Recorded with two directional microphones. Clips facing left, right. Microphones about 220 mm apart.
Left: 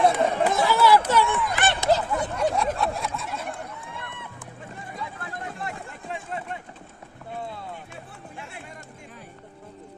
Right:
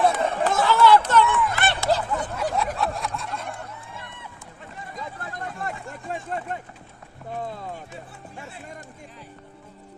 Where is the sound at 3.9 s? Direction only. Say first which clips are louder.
Left 2 dB; 55° left (ahead or behind).